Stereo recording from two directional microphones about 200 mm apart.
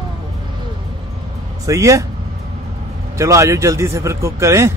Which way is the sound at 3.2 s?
15° right (ahead or behind).